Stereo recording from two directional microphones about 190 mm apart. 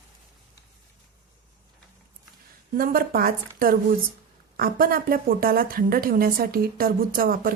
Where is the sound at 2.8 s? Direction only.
50° right (ahead or behind).